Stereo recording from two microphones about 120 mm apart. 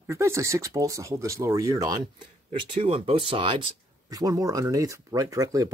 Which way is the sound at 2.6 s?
50° right (ahead or behind).